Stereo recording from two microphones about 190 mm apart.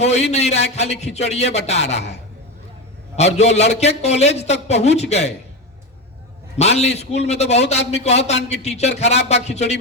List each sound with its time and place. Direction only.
0.0 s a man's voice: 35° left (ahead or behind)
3.3 s a man's voice: 35° left (ahead or behind)
6.6 s a man's voice: 35° left (ahead or behind)